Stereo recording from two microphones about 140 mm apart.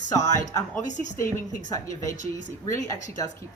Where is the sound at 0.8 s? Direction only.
60° left (ahead or behind).